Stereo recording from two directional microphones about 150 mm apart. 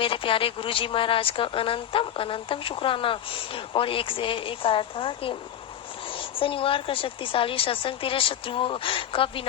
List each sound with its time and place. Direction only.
0.0 s a woman's voice: 35° left (ahead or behind)